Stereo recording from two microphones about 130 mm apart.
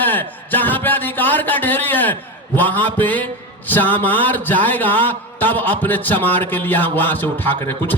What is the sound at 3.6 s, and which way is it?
Speech, 15° left (ahead or behind).